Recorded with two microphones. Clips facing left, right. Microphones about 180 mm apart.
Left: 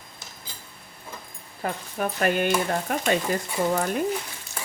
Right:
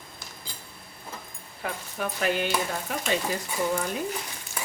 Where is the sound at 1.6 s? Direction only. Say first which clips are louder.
Left 4 dB; 40° left (ahead or behind).